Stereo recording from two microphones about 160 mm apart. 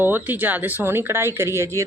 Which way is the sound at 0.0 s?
10° right (ahead or behind).